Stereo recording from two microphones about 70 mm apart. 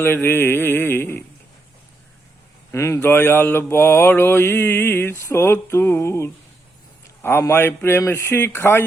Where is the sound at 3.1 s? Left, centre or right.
Left.